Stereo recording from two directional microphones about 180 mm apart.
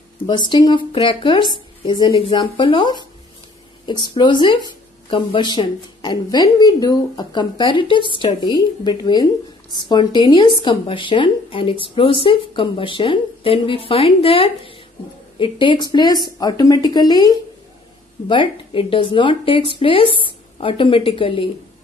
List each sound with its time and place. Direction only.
0.3 s a woman's voice: 25° left (ahead or behind)